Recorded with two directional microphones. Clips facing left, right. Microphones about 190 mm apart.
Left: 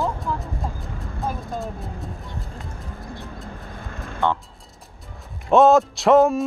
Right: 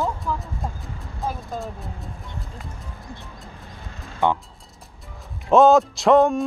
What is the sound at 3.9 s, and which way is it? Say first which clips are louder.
Music: left 6 dB; 55° left (ahead or behind).